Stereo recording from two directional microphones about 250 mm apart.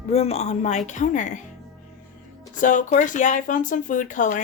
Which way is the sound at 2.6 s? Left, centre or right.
Left.